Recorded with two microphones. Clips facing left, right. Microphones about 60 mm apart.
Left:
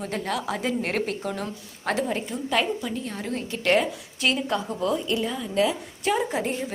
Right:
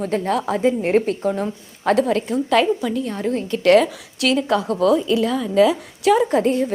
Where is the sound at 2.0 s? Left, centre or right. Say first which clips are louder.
Right 8 dB; right.